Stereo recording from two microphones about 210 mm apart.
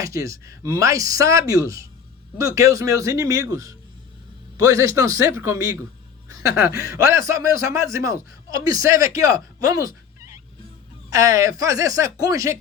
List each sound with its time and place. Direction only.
0.0 s speech: 15° right (ahead or behind)
11.1 s speech: 15° right (ahead or behind)